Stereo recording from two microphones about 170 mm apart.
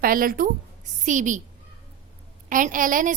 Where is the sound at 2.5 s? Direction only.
50° right (ahead or behind).